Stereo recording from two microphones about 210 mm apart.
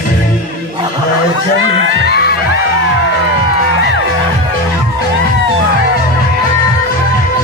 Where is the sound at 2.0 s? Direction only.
50° left (ahead or behind).